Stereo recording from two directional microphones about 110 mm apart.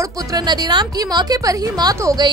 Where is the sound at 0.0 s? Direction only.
35° right (ahead or behind).